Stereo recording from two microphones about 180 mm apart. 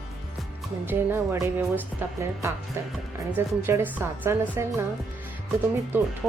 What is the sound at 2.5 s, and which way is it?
A woman's voice, 15° right (ahead or behind).